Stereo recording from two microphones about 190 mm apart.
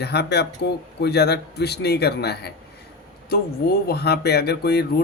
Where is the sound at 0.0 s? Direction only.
60° left (ahead or behind).